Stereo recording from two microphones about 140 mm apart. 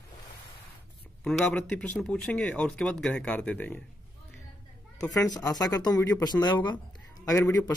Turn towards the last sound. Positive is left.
turn(degrees=25)  # may be behind; listen again after turning